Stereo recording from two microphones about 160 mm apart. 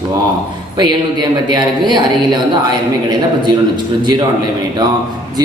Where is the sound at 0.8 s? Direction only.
25° right (ahead or behind).